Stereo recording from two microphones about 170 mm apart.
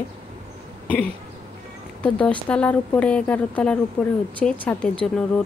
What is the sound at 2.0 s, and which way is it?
Speech, 5° left (ahead or behind).